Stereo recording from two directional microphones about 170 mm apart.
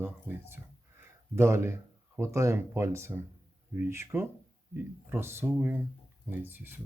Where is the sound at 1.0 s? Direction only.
15° right (ahead or behind).